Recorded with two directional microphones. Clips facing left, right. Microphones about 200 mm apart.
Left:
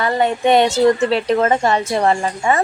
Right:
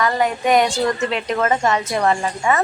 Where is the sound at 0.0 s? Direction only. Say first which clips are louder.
Left 2 dB; 30° left (ahead or behind).